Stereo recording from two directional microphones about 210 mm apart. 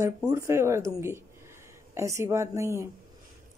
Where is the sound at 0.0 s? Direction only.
15° right (ahead or behind).